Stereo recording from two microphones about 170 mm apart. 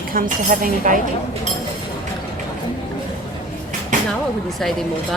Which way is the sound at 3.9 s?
50° right (ahead or behind).